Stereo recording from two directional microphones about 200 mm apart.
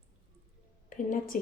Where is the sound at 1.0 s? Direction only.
40° left (ahead or behind).